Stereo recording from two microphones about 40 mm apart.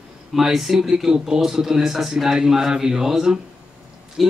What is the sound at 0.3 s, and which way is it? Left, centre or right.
Speech, centre.